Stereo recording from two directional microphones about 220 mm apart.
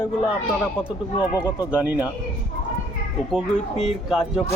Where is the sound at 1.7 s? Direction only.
5° right (ahead or behind).